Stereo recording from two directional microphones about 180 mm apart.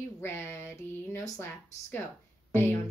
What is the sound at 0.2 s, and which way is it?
Speech, 10° left (ahead or behind).